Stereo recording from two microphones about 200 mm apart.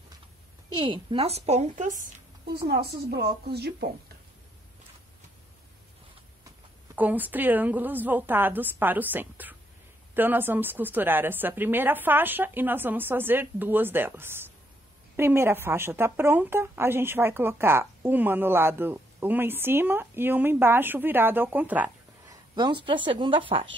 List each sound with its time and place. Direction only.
0.7 s a woman's voice: 25° right (ahead or behind)
2.5 s a woman's voice: 50° right (ahead or behind)
7.0 s a woman's voice: 10° right (ahead or behind)
22.6 s speech: 25° right (ahead or behind)